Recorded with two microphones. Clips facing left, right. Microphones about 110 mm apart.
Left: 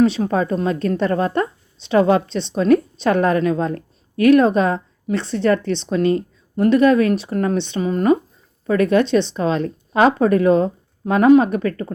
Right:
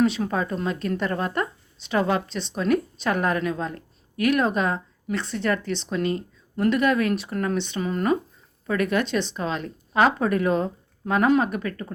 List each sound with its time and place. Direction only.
0.0 s a woman's voice: 30° left (ahead or behind)
9.3 s a woman's voice: 35° left (ahead or behind)
11.4 s a woman's voice: 40° left (ahead or behind)